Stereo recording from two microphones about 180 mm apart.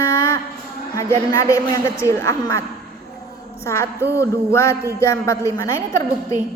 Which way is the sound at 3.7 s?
15° left (ahead or behind).